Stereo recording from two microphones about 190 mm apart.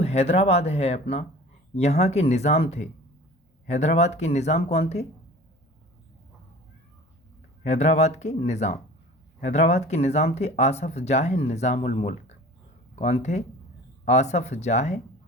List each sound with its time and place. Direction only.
0.0 s speech: 35° left (ahead or behind)
7.6 s speech: 40° left (ahead or behind)